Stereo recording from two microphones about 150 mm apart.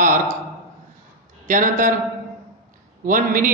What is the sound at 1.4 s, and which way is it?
Speech, 60° right (ahead or behind).